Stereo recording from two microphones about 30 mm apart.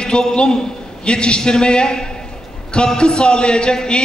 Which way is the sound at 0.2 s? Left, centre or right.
Left.